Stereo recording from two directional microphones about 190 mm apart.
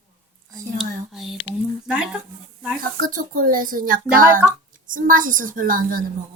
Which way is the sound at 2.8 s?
45° right (ahead or behind).